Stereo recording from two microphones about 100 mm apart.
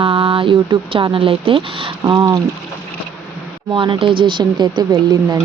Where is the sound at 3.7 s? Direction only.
55° right (ahead or behind).